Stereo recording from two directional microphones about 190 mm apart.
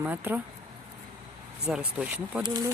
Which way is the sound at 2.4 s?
20° right (ahead or behind).